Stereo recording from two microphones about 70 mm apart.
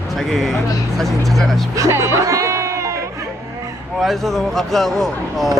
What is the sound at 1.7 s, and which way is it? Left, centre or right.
Music, right.